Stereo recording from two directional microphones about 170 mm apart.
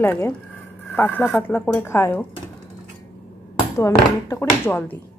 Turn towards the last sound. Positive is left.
turn(degrees=10)  # may be behind; listen again after turning